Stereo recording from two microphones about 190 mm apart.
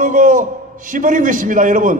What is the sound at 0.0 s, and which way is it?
A man's voice, 45° right (ahead or behind).